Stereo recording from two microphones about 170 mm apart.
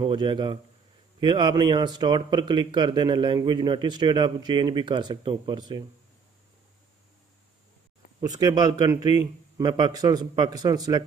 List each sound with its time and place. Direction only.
0.0 s speech: 25° right (ahead or behind)
8.2 s speech: 20° right (ahead or behind)